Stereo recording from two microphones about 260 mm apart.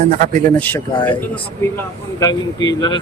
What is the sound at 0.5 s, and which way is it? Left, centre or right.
Speech, centre.